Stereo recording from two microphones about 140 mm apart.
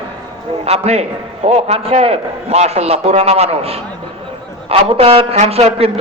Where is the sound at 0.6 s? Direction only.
45° right (ahead or behind).